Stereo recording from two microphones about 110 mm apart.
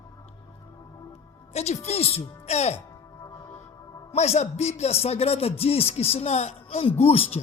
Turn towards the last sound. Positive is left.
turn(degrees=65)  # may be behind; listen again after turning